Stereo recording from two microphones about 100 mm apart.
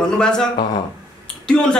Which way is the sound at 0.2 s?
5° left (ahead or behind).